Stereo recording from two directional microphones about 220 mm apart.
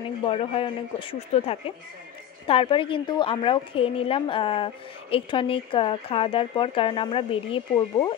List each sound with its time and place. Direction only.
0.2 s speech: 25° left (ahead or behind)